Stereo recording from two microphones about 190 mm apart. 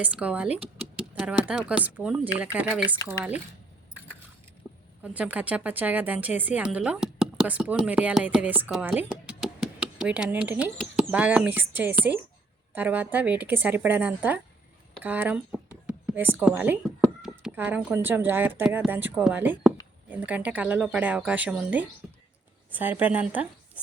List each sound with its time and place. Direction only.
0.0 s speech: 5° right (ahead or behind)
4.7 s vehicle: 15° right (ahead or behind)
5.0 s speech: 5° right (ahead or behind)